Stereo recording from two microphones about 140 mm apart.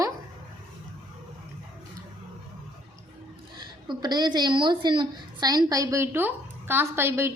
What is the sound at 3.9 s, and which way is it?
A woman's voice, 30° right (ahead or behind).